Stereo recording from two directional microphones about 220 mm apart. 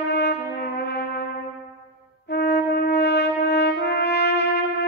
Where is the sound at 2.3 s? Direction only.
50° left (ahead or behind).